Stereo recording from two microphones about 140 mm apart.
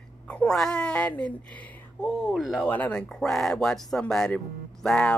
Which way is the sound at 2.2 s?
5° right (ahead or behind).